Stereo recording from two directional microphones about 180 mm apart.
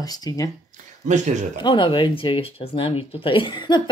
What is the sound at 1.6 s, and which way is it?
Speech, 25° left (ahead or behind).